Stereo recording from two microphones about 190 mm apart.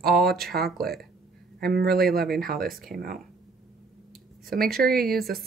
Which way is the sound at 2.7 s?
Centre (ahead or behind).